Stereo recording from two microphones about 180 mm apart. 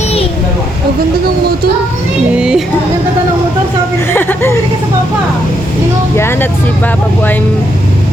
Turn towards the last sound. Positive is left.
turn(degrees=10)  # may be behind; listen again after turning